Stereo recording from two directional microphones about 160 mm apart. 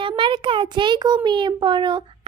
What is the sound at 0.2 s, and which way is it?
A child's voice, 30° right (ahead or behind).